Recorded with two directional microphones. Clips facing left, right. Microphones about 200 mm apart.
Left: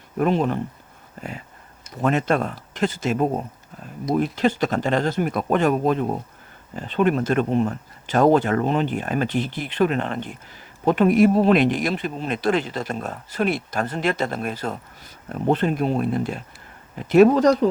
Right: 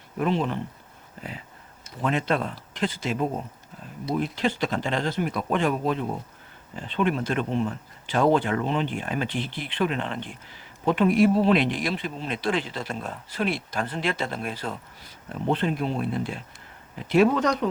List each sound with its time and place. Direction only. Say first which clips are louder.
0.2 s speech: left 5 dB; 45° left (ahead or behind)
2.0 s speech: left 4 dB; 45° left (ahead or behind)